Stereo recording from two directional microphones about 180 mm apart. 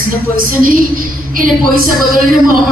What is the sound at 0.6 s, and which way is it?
A man's voice, 50° right (ahead or behind).